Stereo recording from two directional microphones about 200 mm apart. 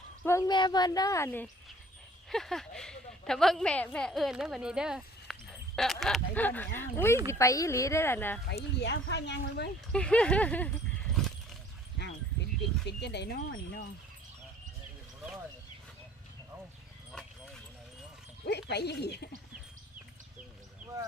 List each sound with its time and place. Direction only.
0.3 s speech: 15° left (ahead or behind)
2.3 s a woman's voice: centre (ahead or behind)
8.4 s speech: 60° left (ahead or behind)
9.9 s speech: 5° left (ahead or behind)
12.8 s speech: 60° left (ahead or behind)
17.1 s dog: centre (ahead or behind)
18.4 s speech: 55° left (ahead or behind)